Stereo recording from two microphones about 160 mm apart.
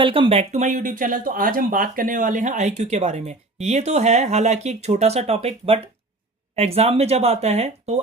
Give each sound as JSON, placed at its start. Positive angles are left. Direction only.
{"t": 0.0, "sound": "speech", "side_deg": -35}